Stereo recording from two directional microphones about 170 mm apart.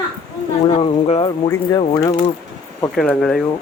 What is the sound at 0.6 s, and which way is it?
Speech, 35° left (ahead or behind).